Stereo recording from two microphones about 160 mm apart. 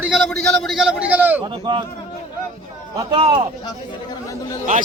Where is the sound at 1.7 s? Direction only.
25° right (ahead or behind).